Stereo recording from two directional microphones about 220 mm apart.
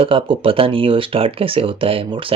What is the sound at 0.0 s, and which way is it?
Speech, 25° right (ahead or behind).